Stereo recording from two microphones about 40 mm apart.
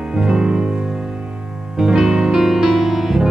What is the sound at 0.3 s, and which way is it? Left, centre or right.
Music, centre.